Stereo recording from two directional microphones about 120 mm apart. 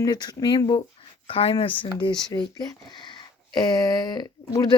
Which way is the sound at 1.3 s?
50° left (ahead or behind).